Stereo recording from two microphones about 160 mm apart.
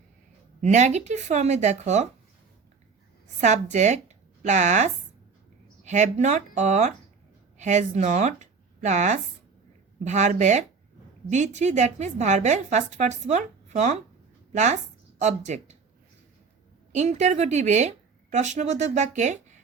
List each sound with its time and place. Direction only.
0.6 s a woman's voice: 45° right (ahead or behind)
3.4 s a woman's voice: 45° right (ahead or behind)
16.9 s a woman's voice: 45° right (ahead or behind)